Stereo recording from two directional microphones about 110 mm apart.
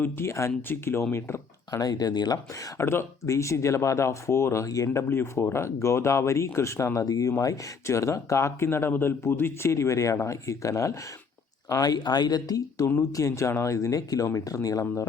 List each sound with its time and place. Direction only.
0.0 s speech: 25° left (ahead or behind)